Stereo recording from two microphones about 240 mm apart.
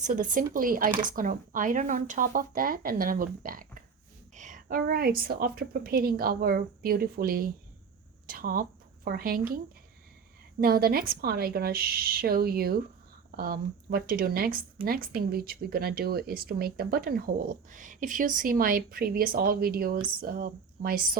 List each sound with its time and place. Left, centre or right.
0.0 s speech: right
10.6 s speech: right